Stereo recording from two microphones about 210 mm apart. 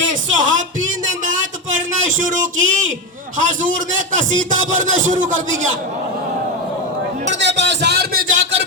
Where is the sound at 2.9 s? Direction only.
40° right (ahead or behind).